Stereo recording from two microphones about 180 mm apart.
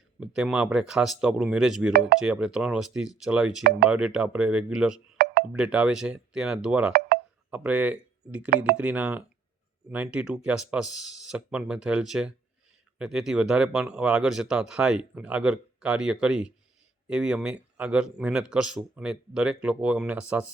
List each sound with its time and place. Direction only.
0.2 s speech: 5° right (ahead or behind)
5.1 s a sound: 60° right (ahead or behind)
5.5 s speech: 5° right (ahead or behind)